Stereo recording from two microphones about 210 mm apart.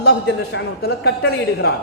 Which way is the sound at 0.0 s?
55° left (ahead or behind).